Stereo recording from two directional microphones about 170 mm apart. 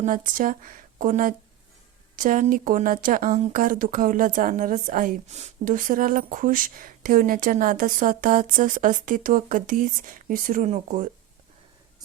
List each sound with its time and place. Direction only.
0.0 s speech: 50° right (ahead or behind)